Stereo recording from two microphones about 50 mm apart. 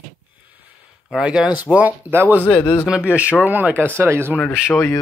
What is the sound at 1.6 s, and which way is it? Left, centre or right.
Speech, right.